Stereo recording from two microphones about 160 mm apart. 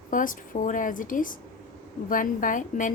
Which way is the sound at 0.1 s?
55° left (ahead or behind).